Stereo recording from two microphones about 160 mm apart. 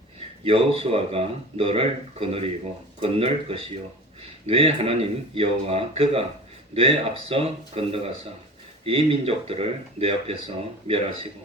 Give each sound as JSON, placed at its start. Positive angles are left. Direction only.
{"t": 0.4, "sound": "speech", "side_deg": -35}